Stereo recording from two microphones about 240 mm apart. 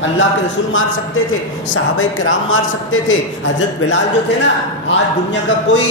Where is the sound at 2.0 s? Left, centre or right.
Left.